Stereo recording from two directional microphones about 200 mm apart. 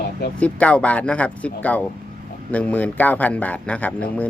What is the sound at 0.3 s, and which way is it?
Speech, 5° left (ahead or behind).